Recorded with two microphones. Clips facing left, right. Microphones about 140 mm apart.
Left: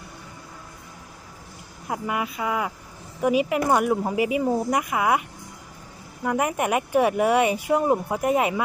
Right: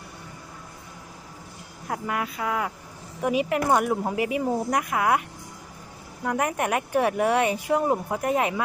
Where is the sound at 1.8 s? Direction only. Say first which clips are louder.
Left 1 dB; 10° left (ahead or behind).